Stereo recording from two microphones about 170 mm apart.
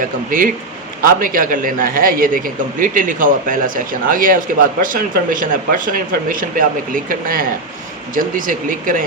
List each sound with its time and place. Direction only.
0.3 s a man's voice: 55° right (ahead or behind)